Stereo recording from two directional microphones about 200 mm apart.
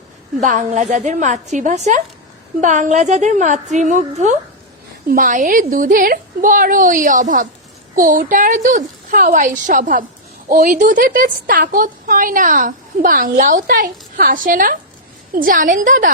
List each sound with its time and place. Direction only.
0.3 s a woman's voice: 40° right (ahead or behind)